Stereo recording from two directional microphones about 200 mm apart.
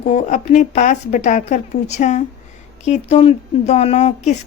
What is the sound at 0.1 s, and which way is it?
Speech, 35° left (ahead or behind).